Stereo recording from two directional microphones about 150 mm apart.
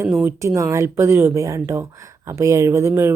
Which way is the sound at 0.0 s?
15° right (ahead or behind).